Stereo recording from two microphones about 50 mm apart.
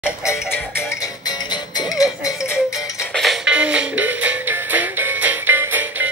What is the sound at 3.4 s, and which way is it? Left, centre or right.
Music, right.